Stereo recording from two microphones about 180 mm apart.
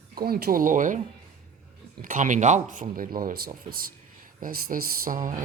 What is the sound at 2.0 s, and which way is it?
Speech, 45° right (ahead or behind).